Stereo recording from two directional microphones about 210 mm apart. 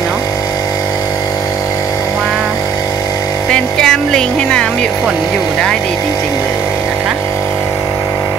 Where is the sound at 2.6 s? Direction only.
15° left (ahead or behind).